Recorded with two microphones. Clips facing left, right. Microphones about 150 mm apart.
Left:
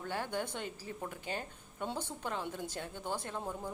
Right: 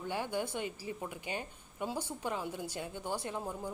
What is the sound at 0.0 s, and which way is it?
A woman's voice, 15° right (ahead or behind).